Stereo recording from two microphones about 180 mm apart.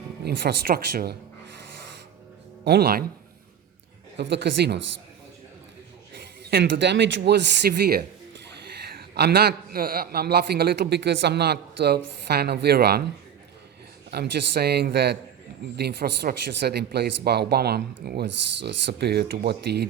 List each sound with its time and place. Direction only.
0.3 s a man's voice: 60° right (ahead or behind)
2.6 s a man's voice: 60° right (ahead or behind)
4.2 s a man's voice: 70° right (ahead or behind)
6.5 s a man's voice: 65° right (ahead or behind)
14.1 s a man's voice: 60° right (ahead or behind)